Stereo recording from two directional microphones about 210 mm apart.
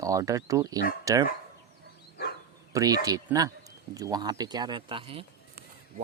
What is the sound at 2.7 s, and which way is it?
Speech, 15° right (ahead or behind).